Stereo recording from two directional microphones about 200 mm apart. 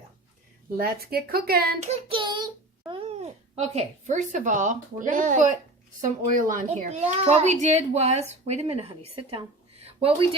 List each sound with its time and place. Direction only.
0.8 s speech: 50° right (ahead or behind)
1.8 s a child's voice: 25° right (ahead or behind)